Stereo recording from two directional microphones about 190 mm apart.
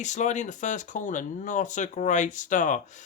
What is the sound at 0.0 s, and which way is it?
Speech, 40° left (ahead or behind).